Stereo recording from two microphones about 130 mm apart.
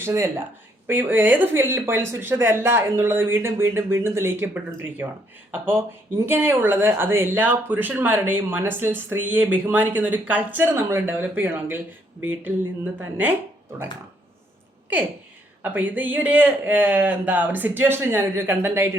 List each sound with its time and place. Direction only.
0.0 s speech: 20° right (ahead or behind)
15.6 s speech: 15° right (ahead or behind)